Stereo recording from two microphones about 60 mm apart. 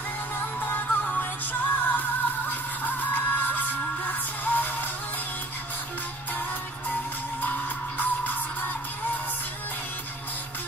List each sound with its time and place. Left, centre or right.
0.6 s music: left
8.0 s music: left